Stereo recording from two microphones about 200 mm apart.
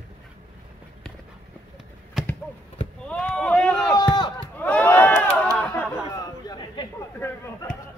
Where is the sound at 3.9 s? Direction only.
20° left (ahead or behind).